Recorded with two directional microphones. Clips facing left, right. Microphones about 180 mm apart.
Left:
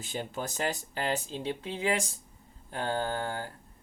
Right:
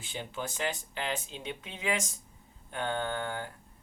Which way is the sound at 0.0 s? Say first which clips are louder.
Left 3 dB; 40° left (ahead or behind).